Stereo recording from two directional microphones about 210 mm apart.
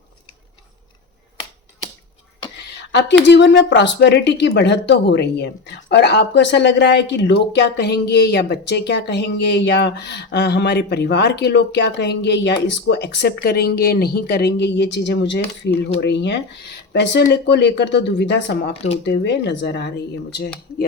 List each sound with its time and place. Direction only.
3.2 s speech: 55° left (ahead or behind)